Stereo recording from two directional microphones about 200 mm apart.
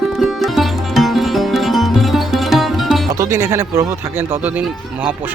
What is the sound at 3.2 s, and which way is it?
Speech, 15° right (ahead or behind).